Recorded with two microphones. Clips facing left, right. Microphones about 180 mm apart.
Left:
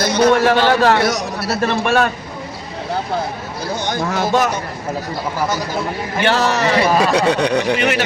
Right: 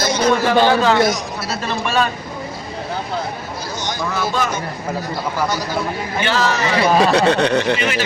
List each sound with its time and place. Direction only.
0.0 s a man's voice: 60° left (ahead or behind)
3.8 s speech: 55° left (ahead or behind)
6.2 s a man's voice: 60° left (ahead or behind)
6.9 s speech: 10° left (ahead or behind)
7.8 s a man's voice: 65° left (ahead or behind)